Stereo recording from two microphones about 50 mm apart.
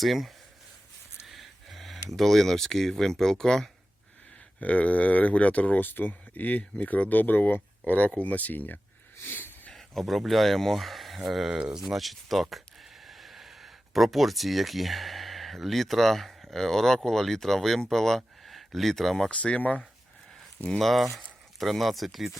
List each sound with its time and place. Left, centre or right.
0.0 s speech: centre
4.6 s speech: left
9.2 s a sound: left
9.7 s speech: centre
11.4 s speech: centre
11.8 s speech: centre
19.3 s speech: left
20.7 s speech: centre